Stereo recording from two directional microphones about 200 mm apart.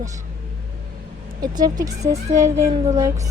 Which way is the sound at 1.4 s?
20° right (ahead or behind).